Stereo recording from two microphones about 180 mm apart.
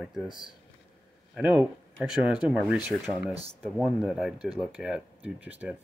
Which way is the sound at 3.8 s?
Centre (ahead or behind).